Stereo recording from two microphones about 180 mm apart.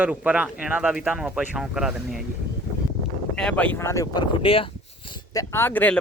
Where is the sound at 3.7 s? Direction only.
15° left (ahead or behind).